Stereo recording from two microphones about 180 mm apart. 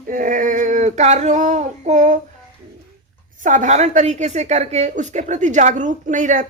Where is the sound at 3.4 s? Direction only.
45° right (ahead or behind).